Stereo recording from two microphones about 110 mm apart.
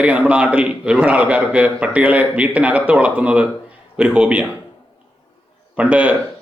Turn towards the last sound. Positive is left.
turn(degrees=-10)  # may be behind; listen again after turning